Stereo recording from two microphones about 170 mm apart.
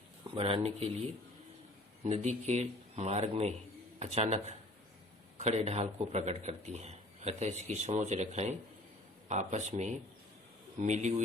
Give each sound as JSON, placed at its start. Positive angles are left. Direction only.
{"t": 0.3, "sound": "a man's voice", "side_deg": -35}
{"t": 2.0, "sound": "a man's voice", "side_deg": -40}